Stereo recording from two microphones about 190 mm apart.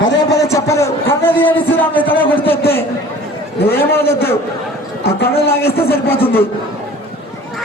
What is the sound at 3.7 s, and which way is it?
Speech, 10° left (ahead or behind).